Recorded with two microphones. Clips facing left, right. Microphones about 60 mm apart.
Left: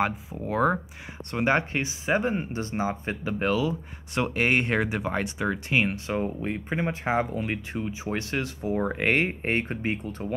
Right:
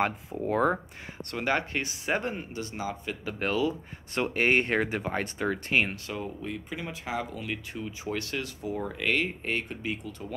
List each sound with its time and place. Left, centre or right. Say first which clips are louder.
0.0 s speech: left 1 dB; centre
1.3 s speech: left 4 dB; left
2.5 s speech: left 5 dB; left
3.3 s speech: left 2 dB; centre
6.0 s speech: left 7 dB; left